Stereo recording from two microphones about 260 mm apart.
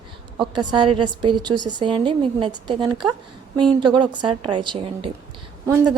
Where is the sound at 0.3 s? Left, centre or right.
Centre.